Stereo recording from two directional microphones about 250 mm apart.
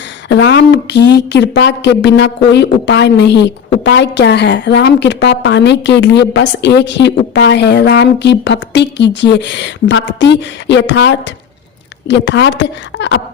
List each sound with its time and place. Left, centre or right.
0.3 s a woman's voice: left